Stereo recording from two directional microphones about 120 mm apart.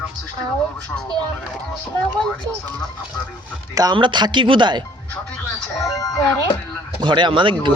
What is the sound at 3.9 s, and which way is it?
Speech, 40° right (ahead or behind).